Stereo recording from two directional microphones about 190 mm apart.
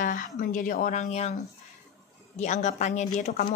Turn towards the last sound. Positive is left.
turn(degrees=40)  # may be behind; listen again after turning